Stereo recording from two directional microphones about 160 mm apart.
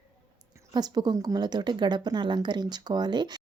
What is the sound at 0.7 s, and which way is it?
Speech, 25° right (ahead or behind).